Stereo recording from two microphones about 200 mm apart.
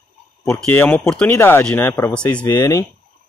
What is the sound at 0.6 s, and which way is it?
Speech, 10° left (ahead or behind).